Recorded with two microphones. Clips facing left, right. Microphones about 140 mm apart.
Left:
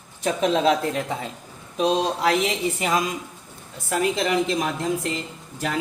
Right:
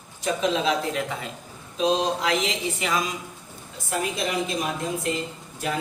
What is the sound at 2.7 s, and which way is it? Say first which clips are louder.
Speech: left 3 dB; 45° left (ahead or behind).